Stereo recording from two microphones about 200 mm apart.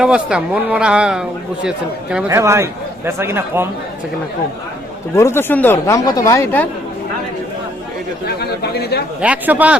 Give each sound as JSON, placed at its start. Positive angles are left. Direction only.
{"t": 0.0, "sound": "speech", "side_deg": -5}
{"t": 5.1, "sound": "speech", "side_deg": 15}
{"t": 8.4, "sound": "speech", "side_deg": 50}
{"t": 9.2, "sound": "speech", "side_deg": -5}